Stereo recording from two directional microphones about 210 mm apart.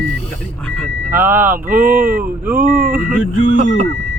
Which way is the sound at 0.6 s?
5° left (ahead or behind).